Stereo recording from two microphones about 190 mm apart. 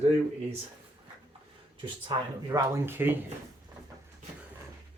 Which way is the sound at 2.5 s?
10° right (ahead or behind).